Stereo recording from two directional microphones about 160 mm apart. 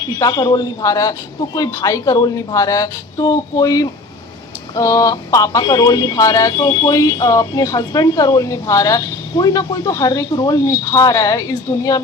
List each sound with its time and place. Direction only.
0.2 s speech: 25° left (ahead or behind)